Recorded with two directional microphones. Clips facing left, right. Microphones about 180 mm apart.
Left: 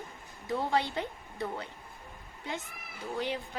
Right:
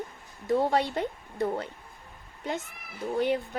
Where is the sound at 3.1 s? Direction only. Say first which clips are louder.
Right 8 dB; 55° right (ahead or behind).